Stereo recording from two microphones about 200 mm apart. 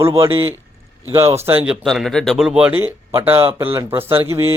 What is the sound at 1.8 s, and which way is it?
Speech, centre (ahead or behind).